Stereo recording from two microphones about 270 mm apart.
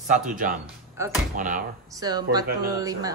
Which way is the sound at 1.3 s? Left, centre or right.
Right.